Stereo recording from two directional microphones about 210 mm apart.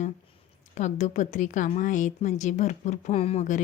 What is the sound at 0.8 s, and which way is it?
A woman's voice, 35° left (ahead or behind).